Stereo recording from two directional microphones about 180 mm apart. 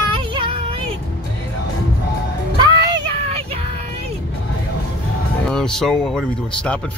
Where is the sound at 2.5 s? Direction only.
25° right (ahead or behind).